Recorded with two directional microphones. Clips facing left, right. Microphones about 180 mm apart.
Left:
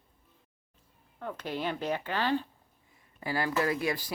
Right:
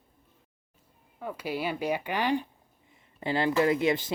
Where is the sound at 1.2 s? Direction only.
10° right (ahead or behind).